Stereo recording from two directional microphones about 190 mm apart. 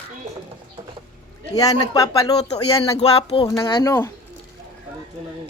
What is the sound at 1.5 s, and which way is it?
Speech, 20° left (ahead or behind).